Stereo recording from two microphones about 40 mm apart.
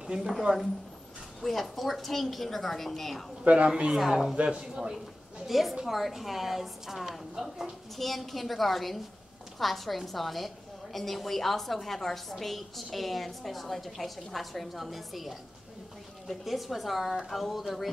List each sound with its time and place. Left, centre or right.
0.2 s speech: centre
1.4 s a woman's voice: centre
3.4 s speech: right
4.1 s speech: centre
4.4 s speech: right
5.5 s a woman's voice: centre
8.0 s a woman's voice: centre